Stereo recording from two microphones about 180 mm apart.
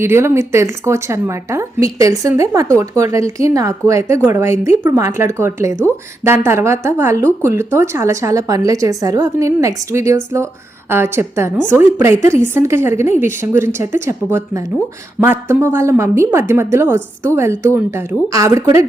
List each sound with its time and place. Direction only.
0.0 s a woman's voice: 15° right (ahead or behind)